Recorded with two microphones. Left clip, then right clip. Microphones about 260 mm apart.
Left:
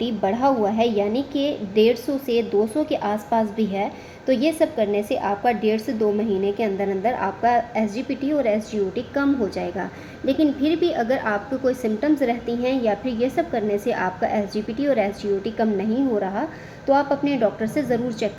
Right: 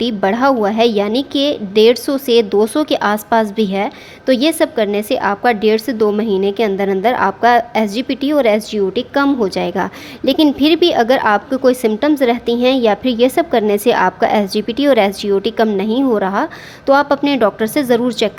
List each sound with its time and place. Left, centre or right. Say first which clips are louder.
0.0 s a woman's voice: right 7 dB; right